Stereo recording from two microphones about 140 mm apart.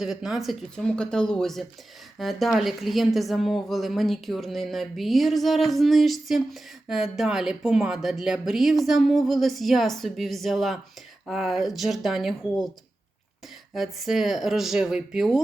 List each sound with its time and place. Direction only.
0.0 s a woman's voice: 5° right (ahead or behind)
13.7 s a woman's voice: centre (ahead or behind)